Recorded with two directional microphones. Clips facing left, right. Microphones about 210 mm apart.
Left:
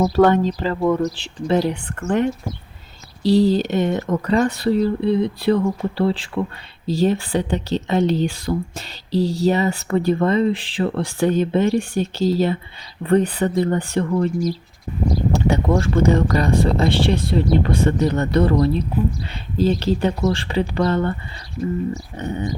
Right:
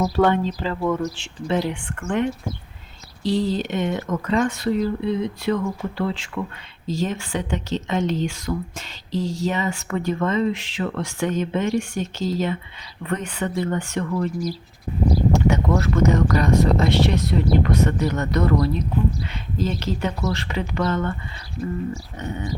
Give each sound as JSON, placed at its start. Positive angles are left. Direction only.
{"t": 0.0, "sound": "speech", "side_deg": 40}
{"t": 22.2, "sound": "speech", "side_deg": 35}